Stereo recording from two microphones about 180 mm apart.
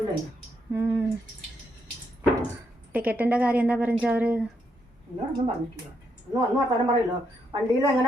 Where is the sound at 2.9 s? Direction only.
10° right (ahead or behind).